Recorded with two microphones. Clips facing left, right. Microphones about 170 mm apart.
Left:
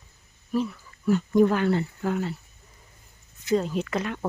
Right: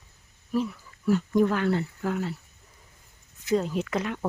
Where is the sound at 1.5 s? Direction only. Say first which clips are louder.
Left 2 dB; 5° left (ahead or behind).